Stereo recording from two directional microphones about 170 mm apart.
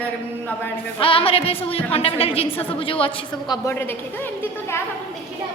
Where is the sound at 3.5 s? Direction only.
15° left (ahead or behind).